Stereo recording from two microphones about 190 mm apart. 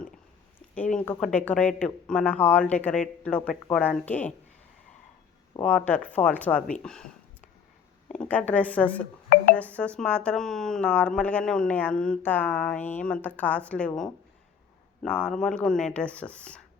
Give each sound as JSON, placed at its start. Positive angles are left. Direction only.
{"t": 0.8, "sound": "speech", "side_deg": 5}
{"t": 5.5, "sound": "speech", "side_deg": 10}
{"t": 6.8, "sound": "a sound", "side_deg": 5}
{"t": 8.0, "sound": "speech", "side_deg": 5}